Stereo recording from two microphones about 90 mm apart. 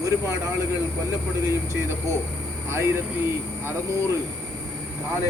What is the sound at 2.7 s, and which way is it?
Speech, 30° right (ahead or behind).